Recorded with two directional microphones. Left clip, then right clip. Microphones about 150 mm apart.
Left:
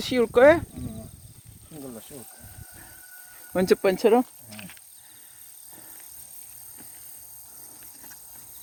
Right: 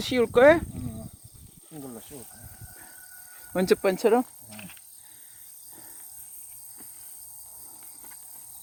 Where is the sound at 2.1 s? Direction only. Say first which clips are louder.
Left 1 dB; 40° left (ahead or behind).